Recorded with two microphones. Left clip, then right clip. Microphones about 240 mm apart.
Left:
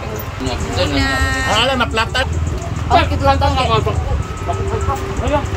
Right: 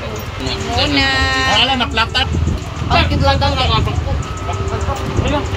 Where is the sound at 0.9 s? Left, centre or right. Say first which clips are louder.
Right 5 dB; centre.